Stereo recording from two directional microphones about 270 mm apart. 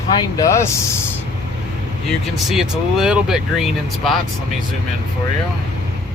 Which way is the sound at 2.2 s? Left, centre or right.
Centre.